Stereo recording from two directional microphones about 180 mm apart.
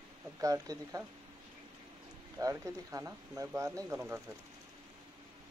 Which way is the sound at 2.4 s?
20° right (ahead or behind).